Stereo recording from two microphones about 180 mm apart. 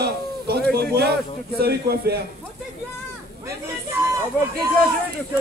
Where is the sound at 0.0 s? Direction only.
65° right (ahead or behind).